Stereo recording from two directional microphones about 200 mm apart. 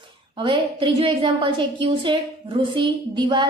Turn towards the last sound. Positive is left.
turn(degrees=-20)  # may be behind; listen again after turning